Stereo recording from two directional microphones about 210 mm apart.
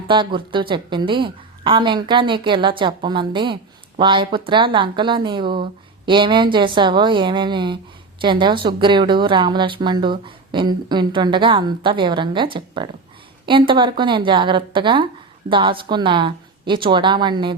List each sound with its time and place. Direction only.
0.1 s a woman's voice: 25° right (ahead or behind)